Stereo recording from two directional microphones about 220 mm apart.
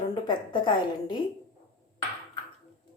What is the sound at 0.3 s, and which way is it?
Speech, 20° left (ahead or behind).